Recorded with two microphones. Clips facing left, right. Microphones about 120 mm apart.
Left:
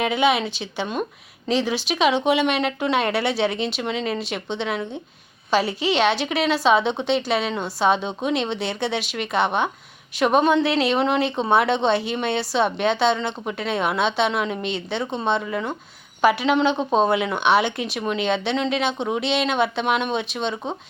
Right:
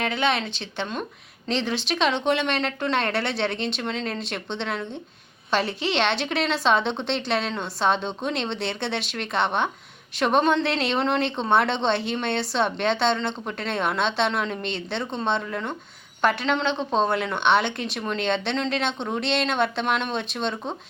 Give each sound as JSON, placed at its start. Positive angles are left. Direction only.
{"t": 0.0, "sound": "speech", "side_deg": 10}